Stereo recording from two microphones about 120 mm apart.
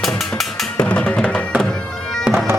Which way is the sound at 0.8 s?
10° left (ahead or behind).